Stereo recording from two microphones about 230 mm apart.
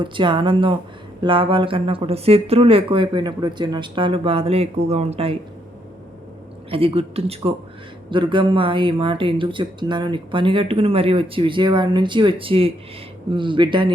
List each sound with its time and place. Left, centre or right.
0.0 s speech: right
6.7 s speech: right